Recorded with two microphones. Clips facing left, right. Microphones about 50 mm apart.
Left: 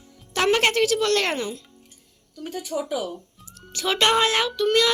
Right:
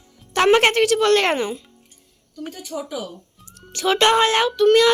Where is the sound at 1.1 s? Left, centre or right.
Centre.